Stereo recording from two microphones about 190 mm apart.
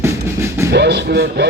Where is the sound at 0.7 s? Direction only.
60° right (ahead or behind).